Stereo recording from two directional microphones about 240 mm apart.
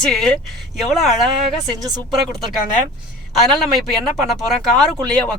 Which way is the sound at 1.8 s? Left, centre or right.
Centre.